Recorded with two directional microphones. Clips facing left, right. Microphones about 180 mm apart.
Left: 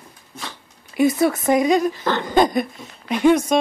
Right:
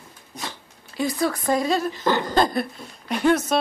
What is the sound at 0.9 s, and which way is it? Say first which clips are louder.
Speech: left 7 dB; 20° left (ahead or behind).